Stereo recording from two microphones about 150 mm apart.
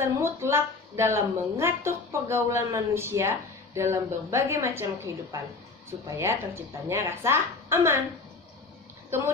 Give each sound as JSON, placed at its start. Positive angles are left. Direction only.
{"t": 0.0, "sound": "a woman's voice", "side_deg": -15}